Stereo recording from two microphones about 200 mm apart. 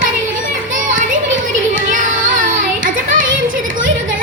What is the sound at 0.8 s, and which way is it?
Children playing, 40° right (ahead or behind).